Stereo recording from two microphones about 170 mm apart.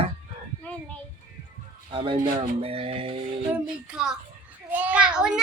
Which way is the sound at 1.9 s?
30° right (ahead or behind).